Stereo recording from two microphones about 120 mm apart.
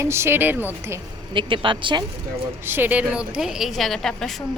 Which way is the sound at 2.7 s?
15° right (ahead or behind).